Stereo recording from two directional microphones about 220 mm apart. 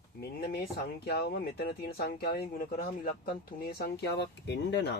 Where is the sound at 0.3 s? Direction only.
45° left (ahead or behind).